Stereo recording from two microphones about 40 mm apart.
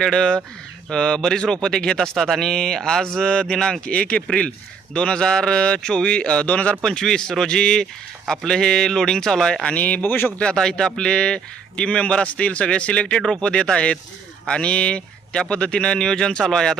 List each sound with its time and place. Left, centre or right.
0.0 s a man's voice: centre
3.8 s a man's voice: left
7.0 s speech: centre
9.7 s speech: left
10.4 s speech: centre
11.8 s a man's voice: left; by 16.7 s centre